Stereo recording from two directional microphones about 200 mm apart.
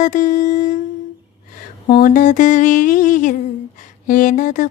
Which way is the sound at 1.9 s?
45° left (ahead or behind).